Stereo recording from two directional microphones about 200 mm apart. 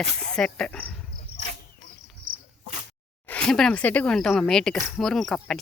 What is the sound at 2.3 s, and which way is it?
Cricket, 45° right (ahead or behind).